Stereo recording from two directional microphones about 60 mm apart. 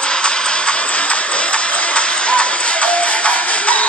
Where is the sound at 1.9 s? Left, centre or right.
Centre.